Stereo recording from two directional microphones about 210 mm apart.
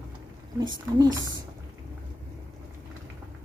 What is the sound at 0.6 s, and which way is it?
Speech, 20° right (ahead or behind).